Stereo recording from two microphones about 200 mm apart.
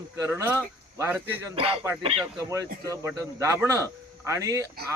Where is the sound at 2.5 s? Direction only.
15° right (ahead or behind).